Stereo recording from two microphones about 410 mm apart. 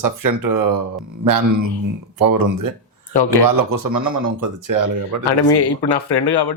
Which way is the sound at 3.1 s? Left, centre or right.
Left.